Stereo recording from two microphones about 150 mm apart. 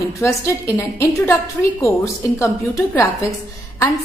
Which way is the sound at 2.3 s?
20° left (ahead or behind).